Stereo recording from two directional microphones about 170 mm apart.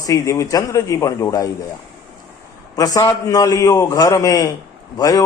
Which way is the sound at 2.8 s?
20° left (ahead or behind).